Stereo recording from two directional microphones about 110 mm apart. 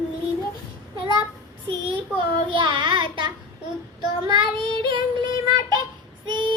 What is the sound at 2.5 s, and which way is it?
Child singing, 45° right (ahead or behind).